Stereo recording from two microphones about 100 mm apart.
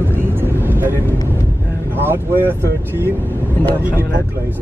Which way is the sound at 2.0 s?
20° right (ahead or behind).